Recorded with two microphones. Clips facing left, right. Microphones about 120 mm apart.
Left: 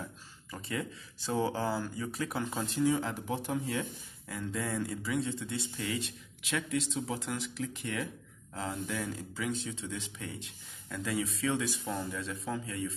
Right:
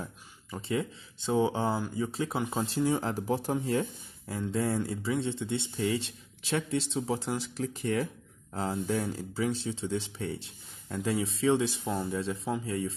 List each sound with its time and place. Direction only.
0.5 s speech: 25° right (ahead or behind)